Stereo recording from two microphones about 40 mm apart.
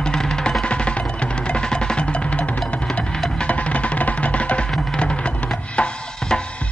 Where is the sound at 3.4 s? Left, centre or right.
Left.